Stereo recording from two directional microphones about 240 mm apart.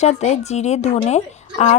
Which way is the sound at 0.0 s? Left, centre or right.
Left.